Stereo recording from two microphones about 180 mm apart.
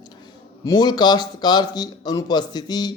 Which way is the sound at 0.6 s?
20° left (ahead or behind).